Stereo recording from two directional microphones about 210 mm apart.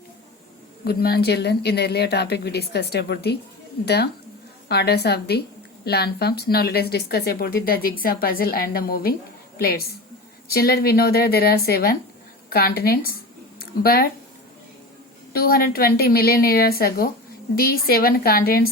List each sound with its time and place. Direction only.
0.9 s a woman's voice: 50° left (ahead or behind)
15.3 s a woman's voice: 45° left (ahead or behind)